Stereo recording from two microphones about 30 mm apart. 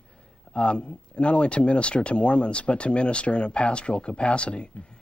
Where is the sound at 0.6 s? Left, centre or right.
Left.